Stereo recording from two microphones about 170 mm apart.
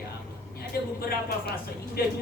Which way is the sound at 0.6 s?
65° left (ahead or behind).